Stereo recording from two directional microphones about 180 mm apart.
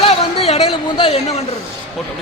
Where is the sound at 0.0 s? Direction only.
30° left (ahead or behind).